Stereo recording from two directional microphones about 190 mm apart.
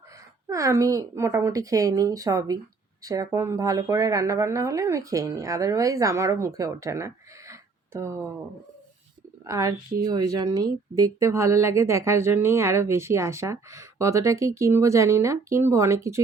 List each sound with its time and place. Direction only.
0.4 s speech: 15° right (ahead or behind)
9.4 s speech: 15° right (ahead or behind)